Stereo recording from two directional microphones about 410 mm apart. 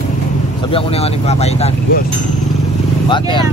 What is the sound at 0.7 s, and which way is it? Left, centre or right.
Speech, centre.